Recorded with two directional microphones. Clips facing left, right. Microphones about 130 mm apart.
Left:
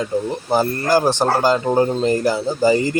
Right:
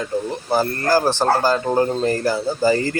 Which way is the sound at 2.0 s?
20° left (ahead or behind).